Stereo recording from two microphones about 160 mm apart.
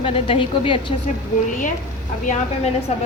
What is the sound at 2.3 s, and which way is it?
Speech, 45° left (ahead or behind).